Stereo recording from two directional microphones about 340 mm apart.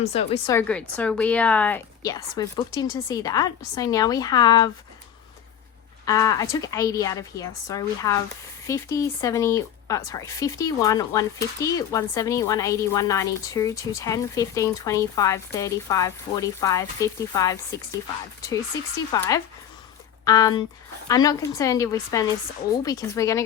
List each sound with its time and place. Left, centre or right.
0.0 s speech: centre
6.1 s speech: centre
19.1 s speech: centre